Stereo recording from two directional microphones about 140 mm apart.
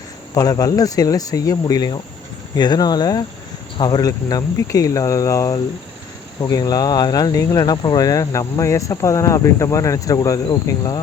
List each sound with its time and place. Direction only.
0.3 s speech: 25° left (ahead or behind)
10.4 s cricket: 30° left (ahead or behind)